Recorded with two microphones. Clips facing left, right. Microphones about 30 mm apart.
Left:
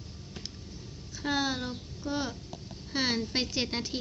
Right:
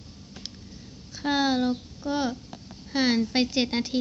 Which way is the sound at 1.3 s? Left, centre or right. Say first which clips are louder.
Right 7 dB; right.